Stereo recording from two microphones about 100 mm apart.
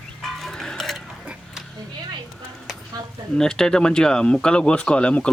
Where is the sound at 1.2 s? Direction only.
10° right (ahead or behind).